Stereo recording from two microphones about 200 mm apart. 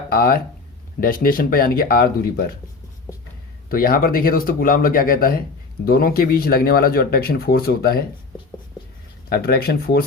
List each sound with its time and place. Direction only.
0.1 s speech: 50° left (ahead or behind)
3.7 s speech: 45° left (ahead or behind)
9.3 s speech: 50° left (ahead or behind)